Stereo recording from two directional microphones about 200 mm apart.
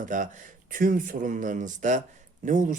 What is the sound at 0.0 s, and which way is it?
Speech, 40° right (ahead or behind).